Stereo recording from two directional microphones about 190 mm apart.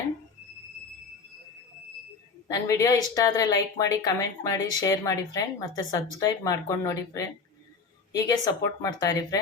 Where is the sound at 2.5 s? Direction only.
20° left (ahead or behind).